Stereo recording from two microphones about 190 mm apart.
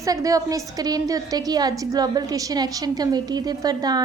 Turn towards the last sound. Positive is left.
turn(degrees=-20)  # may be behind; listen again after turning